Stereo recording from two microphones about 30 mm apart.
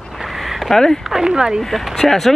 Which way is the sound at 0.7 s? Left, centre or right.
Centre.